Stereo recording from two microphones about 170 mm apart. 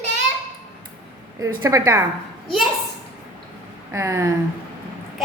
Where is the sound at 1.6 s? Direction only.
20° right (ahead or behind).